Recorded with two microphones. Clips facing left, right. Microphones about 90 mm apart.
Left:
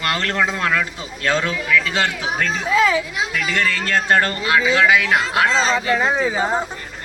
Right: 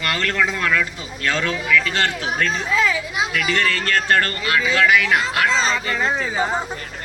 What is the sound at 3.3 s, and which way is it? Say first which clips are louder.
Speech: even; 55° right (ahead or behind).